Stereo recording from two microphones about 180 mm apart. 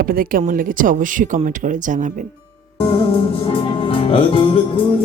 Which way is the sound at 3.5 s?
30° left (ahead or behind).